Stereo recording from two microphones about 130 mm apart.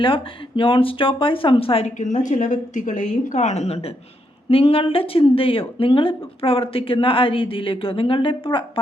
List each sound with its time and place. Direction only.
0.0 s speech: 40° left (ahead or behind)
2.0 s a woman's voice: 70° left (ahead or behind); by 8.8 s 40° left (ahead or behind)